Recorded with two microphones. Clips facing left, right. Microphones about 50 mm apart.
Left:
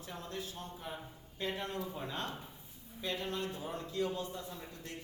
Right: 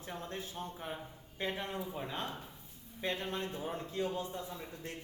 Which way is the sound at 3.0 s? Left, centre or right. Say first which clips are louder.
Right 1 dB; right.